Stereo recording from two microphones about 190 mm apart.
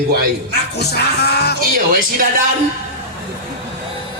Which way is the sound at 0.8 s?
60° left (ahead or behind).